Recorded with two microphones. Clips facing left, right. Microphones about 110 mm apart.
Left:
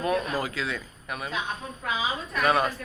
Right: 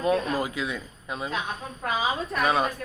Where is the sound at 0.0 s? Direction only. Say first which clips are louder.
Right 2 dB; 25° right (ahead or behind).